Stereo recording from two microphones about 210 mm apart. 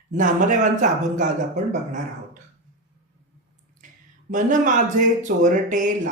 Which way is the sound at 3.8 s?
40° right (ahead or behind).